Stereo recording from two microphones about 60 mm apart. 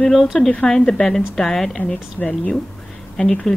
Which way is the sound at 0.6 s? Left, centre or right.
Centre.